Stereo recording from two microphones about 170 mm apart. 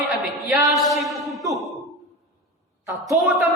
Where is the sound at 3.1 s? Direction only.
5° right (ahead or behind).